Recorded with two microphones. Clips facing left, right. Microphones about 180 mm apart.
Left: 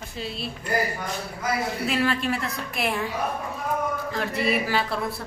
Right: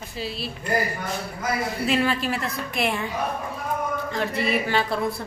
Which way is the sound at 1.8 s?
Centre (ahead or behind).